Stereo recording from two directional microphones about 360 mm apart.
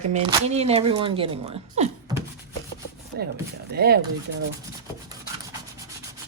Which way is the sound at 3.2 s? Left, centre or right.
Right.